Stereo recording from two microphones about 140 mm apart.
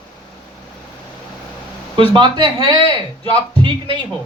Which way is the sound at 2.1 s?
35° right (ahead or behind).